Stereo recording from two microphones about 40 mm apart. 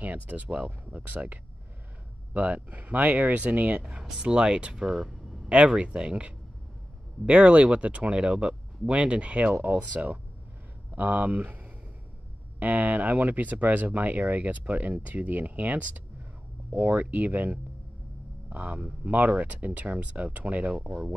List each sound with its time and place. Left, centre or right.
0.0 s speech: right
4.2 s speech: right
4.9 s a sound: centre
5.5 s speech: right
9.6 s speech: right